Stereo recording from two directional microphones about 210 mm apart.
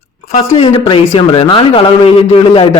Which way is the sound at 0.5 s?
25° left (ahead or behind).